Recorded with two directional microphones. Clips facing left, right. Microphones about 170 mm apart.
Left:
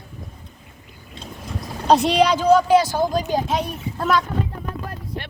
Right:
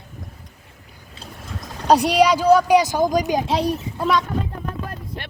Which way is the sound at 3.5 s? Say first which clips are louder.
Right 3 dB; 30° right (ahead or behind).